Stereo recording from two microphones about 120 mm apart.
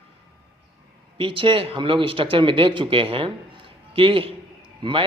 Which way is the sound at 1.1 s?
45° right (ahead or behind).